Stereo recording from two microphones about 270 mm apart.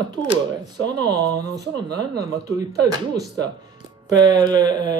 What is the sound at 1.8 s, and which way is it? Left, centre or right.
Speech, right.